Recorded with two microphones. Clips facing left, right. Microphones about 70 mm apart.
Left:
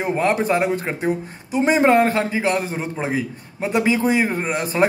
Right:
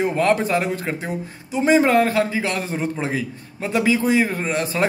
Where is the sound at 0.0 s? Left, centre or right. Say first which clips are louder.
Right 1 dB; centre.